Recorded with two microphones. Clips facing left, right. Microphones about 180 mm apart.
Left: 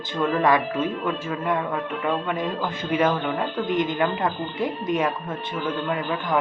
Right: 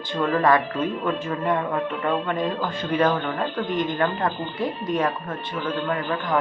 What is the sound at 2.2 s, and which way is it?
A man's voice, 5° left (ahead or behind).